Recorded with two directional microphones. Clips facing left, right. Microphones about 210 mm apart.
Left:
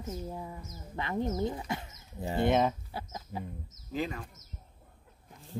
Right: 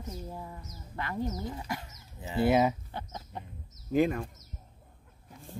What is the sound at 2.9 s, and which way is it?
Speech, 5° left (ahead or behind).